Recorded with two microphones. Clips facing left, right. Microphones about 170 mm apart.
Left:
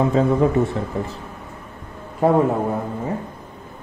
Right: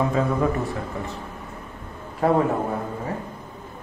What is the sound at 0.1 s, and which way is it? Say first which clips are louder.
Speech: left 5 dB; 25° left (ahead or behind).